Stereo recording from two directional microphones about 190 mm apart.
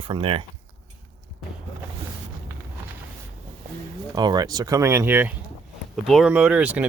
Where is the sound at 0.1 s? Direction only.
25° right (ahead or behind).